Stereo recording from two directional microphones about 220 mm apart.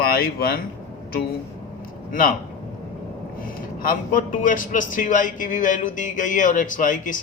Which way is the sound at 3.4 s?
40° left (ahead or behind).